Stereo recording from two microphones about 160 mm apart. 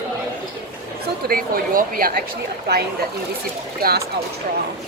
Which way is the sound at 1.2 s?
65° right (ahead or behind).